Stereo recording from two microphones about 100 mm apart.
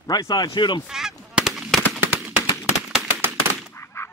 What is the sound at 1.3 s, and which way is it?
Honk, 5° right (ahead or behind).